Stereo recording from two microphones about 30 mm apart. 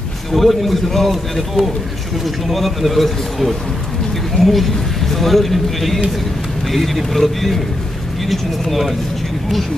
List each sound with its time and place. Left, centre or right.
0.3 s speech: centre